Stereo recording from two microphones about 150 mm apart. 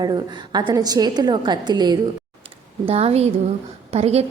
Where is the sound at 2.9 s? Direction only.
40° right (ahead or behind).